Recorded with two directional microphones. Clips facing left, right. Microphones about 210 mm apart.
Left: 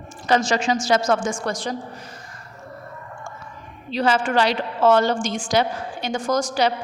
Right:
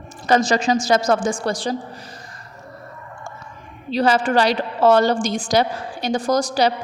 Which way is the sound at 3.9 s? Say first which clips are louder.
Right 3 dB; 35° right (ahead or behind).